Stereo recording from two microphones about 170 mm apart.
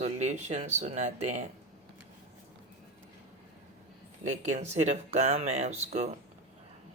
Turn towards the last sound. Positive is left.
turn(degrees=-40)  # may be behind; listen again after turning